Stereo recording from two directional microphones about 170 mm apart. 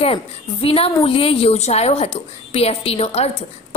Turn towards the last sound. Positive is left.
turn(degrees=35)  # may be behind; listen again after turning